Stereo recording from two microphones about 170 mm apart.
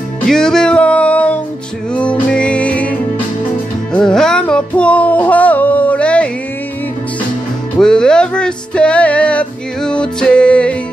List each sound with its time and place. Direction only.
0.3 s music: 5° left (ahead or behind)
7.7 s music: 5° left (ahead or behind)